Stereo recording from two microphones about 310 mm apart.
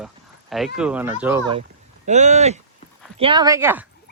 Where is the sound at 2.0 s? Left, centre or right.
Right.